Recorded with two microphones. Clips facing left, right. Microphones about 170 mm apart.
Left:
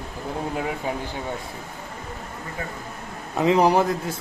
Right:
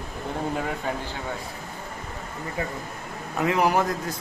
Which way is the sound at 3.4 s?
25° left (ahead or behind).